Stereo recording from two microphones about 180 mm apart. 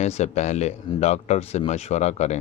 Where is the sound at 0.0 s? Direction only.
40° left (ahead or behind).